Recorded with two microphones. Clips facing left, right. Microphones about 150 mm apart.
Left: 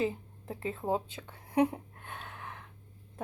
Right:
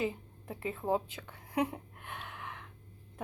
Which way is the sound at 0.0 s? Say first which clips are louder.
Left 3 dB; 30° left (ahead or behind).